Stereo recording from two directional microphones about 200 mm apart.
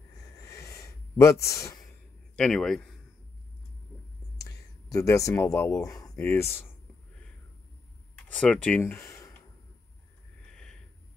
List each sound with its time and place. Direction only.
0.4 s a sound: 15° left (ahead or behind)
2.3 s a man's voice: 5° left (ahead or behind)
4.4 s speech: 15° left (ahead or behind)
8.3 s speech: 5° left (ahead or behind)
10.5 s sniff: centre (ahead or behind)